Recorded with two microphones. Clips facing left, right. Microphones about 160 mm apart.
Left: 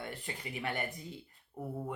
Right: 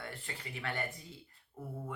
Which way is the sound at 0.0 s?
20° left (ahead or behind).